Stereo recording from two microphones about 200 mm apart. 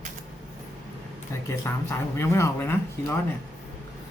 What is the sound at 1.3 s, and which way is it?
Speech, 15° left (ahead or behind).